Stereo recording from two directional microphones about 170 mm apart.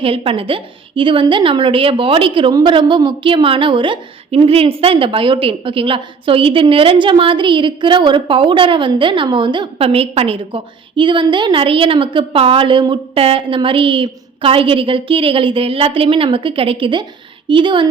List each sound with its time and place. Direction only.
0.0 s a woman's voice: 35° right (ahead or behind)